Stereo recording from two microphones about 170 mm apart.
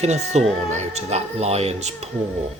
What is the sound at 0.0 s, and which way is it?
Speech, 40° right (ahead or behind).